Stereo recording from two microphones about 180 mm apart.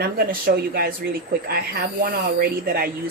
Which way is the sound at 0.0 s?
55° right (ahead or behind).